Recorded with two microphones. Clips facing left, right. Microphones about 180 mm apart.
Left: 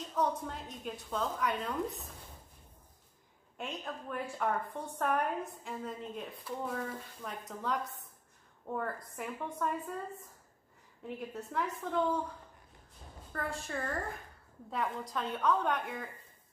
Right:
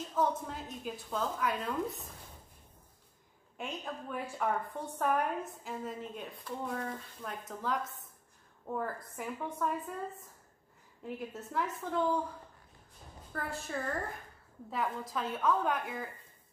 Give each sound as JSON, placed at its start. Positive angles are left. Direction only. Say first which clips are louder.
{"t": 0.1, "sound": "a woman's voice", "louder": "right 1 dB", "side_deg": 0}
{"t": 3.5, "sound": "a woman's voice", "louder": "right 1 dB", "side_deg": 0}
{"t": 11.1, "sound": "a woman's voice", "louder": "even", "side_deg": 0}
{"t": 13.3, "sound": "a woman's voice", "louder": "even", "side_deg": 0}